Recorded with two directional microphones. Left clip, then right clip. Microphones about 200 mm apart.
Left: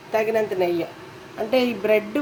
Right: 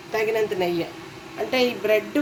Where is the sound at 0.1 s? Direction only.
35° left (ahead or behind).